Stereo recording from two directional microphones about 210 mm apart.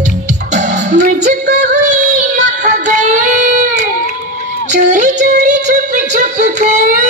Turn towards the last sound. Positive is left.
turn(degrees=-35)  # may be behind; listen again after turning